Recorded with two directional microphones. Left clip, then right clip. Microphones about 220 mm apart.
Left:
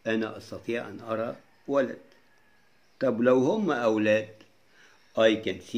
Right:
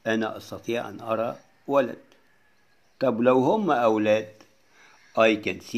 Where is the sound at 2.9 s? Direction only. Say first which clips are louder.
Right 2 dB; 25° right (ahead or behind).